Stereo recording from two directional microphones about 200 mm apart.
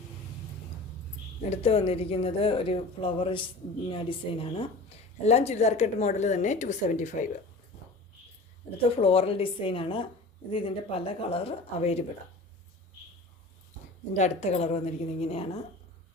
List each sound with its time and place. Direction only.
1.4 s a woman's voice: 30° left (ahead or behind)
9.0 s a woman's voice: 30° left (ahead or behind)
14.1 s a woman's voice: 35° left (ahead or behind)